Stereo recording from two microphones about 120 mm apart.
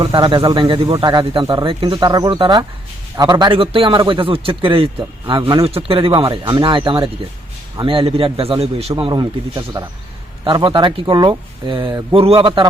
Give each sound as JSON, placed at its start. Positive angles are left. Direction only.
{"t": 0.0, "sound": "a man's voice", "side_deg": -45}
{"t": 3.6, "sound": "a man's voice", "side_deg": -50}
{"t": 9.2, "sound": "speech", "side_deg": -25}
{"t": 10.4, "sound": "a man's voice", "side_deg": -40}